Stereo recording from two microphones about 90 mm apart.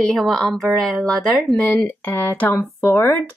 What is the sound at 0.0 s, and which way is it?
Speech, centre (ahead or behind).